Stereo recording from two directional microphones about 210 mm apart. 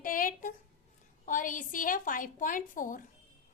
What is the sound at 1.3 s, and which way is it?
A woman's voice, 40° left (ahead or behind).